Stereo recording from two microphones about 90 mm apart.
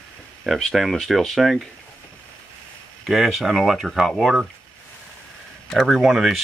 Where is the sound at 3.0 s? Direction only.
5° right (ahead or behind).